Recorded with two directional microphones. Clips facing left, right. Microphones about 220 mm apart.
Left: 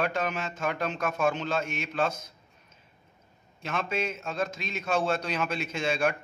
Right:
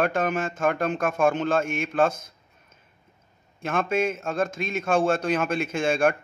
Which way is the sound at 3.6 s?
50° right (ahead or behind).